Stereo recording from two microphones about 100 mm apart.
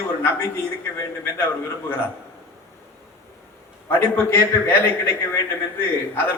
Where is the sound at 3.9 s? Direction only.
20° left (ahead or behind).